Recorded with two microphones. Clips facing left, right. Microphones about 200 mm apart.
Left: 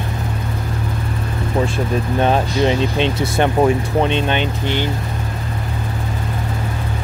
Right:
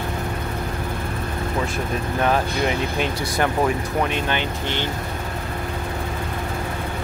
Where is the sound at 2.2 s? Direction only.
25° left (ahead or behind).